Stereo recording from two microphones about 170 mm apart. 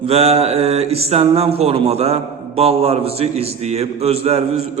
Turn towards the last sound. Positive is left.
turn(degrees=-35)  # may be behind; listen again after turning